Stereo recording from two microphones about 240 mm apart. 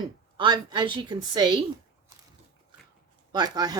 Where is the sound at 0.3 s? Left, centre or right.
Centre.